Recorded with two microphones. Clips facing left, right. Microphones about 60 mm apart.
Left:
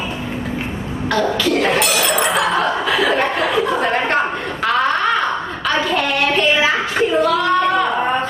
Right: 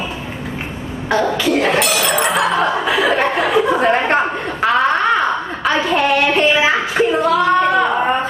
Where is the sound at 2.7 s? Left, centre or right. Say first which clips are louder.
Right 1 dB; centre.